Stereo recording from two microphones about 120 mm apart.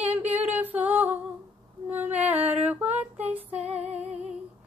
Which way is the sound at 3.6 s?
60° right (ahead or behind).